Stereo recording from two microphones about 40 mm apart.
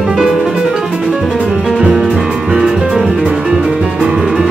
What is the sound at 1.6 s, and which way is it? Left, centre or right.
Music, centre.